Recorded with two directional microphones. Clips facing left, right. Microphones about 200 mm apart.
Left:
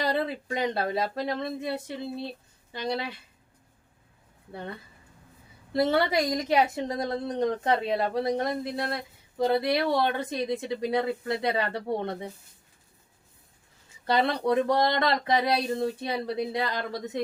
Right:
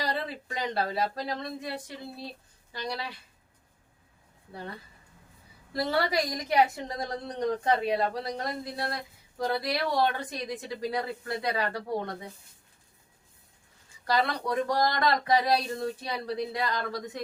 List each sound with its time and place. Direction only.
0.0 s a woman's voice: 25° left (ahead or behind)
5.7 s a woman's voice: 20° left (ahead or behind)
14.1 s a woman's voice: 25° left (ahead or behind)